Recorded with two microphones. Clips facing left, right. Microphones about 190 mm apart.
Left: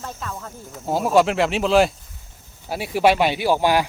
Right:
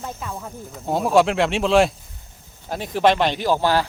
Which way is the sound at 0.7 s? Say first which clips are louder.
Even; centre (ahead or behind).